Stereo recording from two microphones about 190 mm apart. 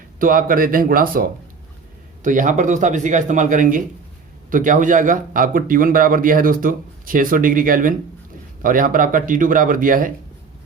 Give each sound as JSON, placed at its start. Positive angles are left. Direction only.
{"t": 0.2, "sound": "a man's voice", "side_deg": -45}